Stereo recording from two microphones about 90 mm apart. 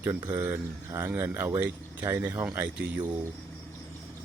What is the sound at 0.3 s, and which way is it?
Speech, 35° right (ahead or behind).